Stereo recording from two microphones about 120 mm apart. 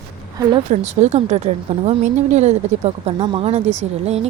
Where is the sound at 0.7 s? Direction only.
70° right (ahead or behind).